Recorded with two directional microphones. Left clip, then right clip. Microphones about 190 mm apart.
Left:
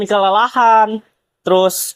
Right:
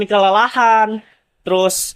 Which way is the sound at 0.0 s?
15° left (ahead or behind).